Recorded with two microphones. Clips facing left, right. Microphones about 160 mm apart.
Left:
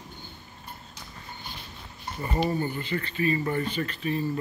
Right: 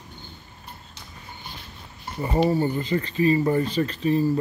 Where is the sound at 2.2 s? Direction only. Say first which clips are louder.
Right 6 dB; 25° right (ahead or behind).